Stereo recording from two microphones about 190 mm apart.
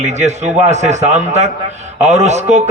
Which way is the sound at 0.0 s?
35° right (ahead or behind).